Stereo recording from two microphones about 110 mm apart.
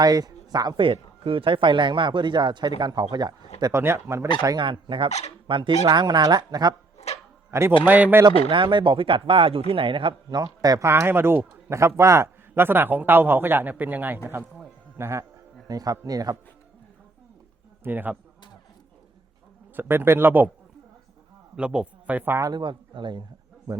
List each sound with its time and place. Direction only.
0.0 s speech: 35° right (ahead or behind)
0.8 s speech: 55° right (ahead or behind)
3.7 s a man's voice: 25° right (ahead or behind)
4.5 s speech: 50° right (ahead or behind)
7.1 s dog: 75° left (ahead or behind)
7.5 s a man's voice: 25° right (ahead or behind)
7.9 s speech: 15° right (ahead or behind)
8.4 s speech: 50° right (ahead or behind)
10.2 s a man's voice: 35° right (ahead or behind)
15.6 s speech: 35° right (ahead or behind)
17.8 s speech: 15° right (ahead or behind)
19.7 s a man's voice: 20° right (ahead or behind)
21.5 s a man's voice: 10° right (ahead or behind)
22.4 s speech: 40° right (ahead or behind)